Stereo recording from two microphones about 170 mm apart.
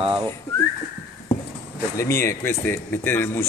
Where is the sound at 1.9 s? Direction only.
15° left (ahead or behind).